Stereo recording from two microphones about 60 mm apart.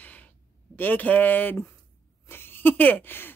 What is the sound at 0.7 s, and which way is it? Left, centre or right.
Speech, left.